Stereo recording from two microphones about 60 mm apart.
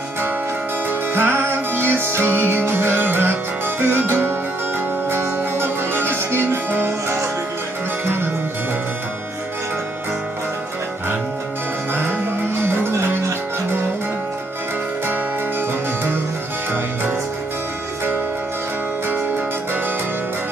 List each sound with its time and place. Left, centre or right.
0.8 s music: right
11.9 s music: right